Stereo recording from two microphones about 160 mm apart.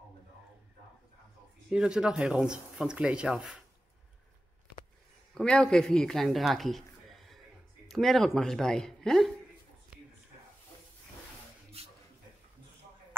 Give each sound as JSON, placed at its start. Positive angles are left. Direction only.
{"t": 1.7, "sound": "speech", "side_deg": -5}
{"t": 5.3, "sound": "a man's voice", "side_deg": 5}
{"t": 11.8, "sound": "a sound", "side_deg": -40}